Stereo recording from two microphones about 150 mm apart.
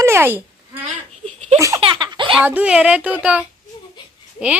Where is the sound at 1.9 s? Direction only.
30° right (ahead or behind).